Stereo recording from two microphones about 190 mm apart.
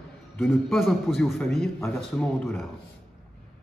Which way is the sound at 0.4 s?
Centre (ahead or behind).